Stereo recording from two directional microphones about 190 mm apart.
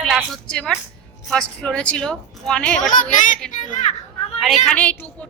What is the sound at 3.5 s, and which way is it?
Speech, 40° left (ahead or behind).